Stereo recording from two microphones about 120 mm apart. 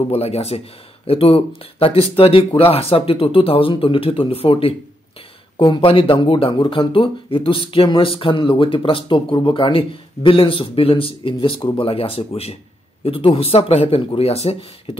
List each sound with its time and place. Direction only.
0.1 s speech: 60° left (ahead or behind)